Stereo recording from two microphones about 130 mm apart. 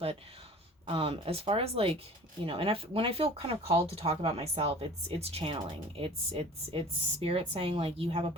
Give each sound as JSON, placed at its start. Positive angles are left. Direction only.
{"t": 0.9, "sound": "speech", "side_deg": -45}